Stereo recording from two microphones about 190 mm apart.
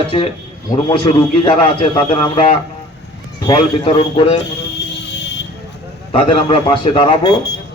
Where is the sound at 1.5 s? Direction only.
30° left (ahead or behind).